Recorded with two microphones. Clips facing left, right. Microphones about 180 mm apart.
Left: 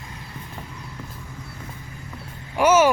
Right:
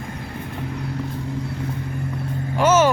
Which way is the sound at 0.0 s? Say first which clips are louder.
Right 8 dB; 60° right (ahead or behind).